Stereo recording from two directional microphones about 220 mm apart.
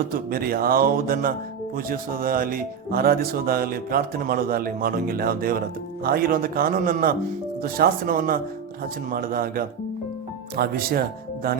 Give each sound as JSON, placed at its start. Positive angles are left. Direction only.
{"t": 0.1, "sound": "speech", "side_deg": -40}